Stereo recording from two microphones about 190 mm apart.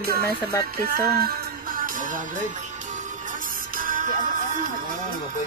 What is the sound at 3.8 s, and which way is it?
Music, 45° right (ahead or behind).